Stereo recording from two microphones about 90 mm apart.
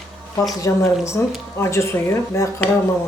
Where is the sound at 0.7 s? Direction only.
35° left (ahead or behind).